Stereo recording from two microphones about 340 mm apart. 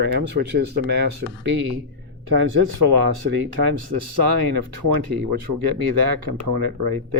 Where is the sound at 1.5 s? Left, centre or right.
Right.